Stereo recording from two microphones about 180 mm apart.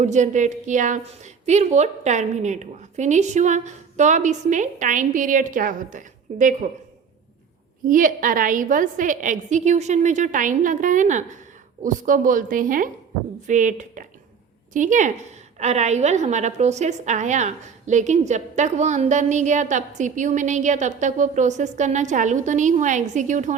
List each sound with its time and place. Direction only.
0.0 s a woman's voice: 40° right (ahead or behind)
7.9 s a woman's voice: 50° right (ahead or behind)